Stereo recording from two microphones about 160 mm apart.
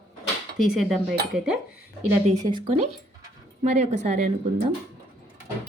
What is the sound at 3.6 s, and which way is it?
Speech, 45° right (ahead or behind).